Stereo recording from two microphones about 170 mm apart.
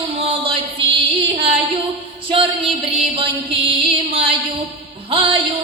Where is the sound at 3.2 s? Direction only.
30° right (ahead or behind).